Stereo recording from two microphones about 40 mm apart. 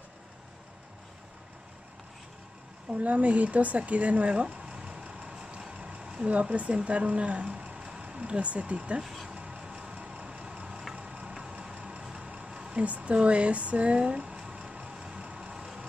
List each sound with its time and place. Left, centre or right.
3.0 s a sound: right
6.2 s speech: right
7.7 s vehicle: right
8.0 s a sound: right
8.3 s speech: right
9.0 s speech: centre
9.3 s vehicle: right
12.0 s vehicle: centre
12.4 s a sound: right
12.8 s speech: right
14.4 s a sound: right
15.5 s vehicle: centre